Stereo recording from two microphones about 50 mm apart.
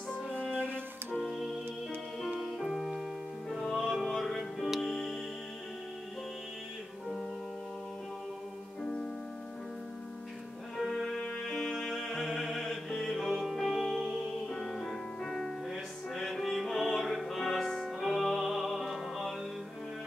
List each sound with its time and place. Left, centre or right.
1.2 s organ: centre
2.4 s music: centre
8.8 s music: centre
10.8 s music: centre
14.5 s music: centre